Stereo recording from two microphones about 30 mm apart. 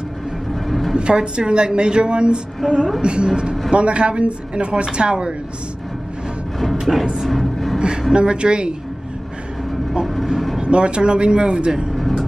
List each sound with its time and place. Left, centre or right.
0.7 s a sound: centre
0.9 s a man's voice: right
3.7 s speech: right
6.6 s music: centre
8.1 s speech: right
10.0 s vehicle: centre
10.6 s speech: right
11.9 s music: centre